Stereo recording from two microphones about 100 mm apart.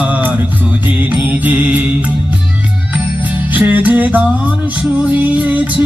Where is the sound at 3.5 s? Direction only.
15° right (ahead or behind).